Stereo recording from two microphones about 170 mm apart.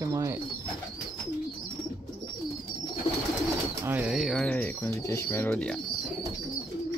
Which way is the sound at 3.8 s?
5° right (ahead or behind).